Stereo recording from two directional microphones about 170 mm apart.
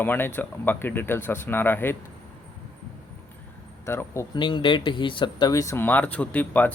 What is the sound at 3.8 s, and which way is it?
Speech, 15° left (ahead or behind).